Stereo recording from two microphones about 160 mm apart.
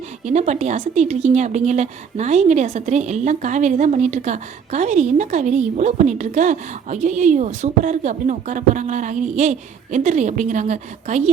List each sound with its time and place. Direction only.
0.3 s a woman's voice: 45° right (ahead or behind)